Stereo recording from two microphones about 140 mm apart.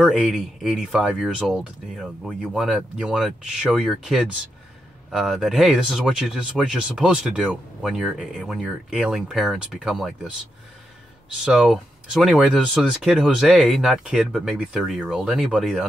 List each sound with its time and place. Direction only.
0.0 s speech: 5° right (ahead or behind)
11.4 s speech: 5° right (ahead or behind)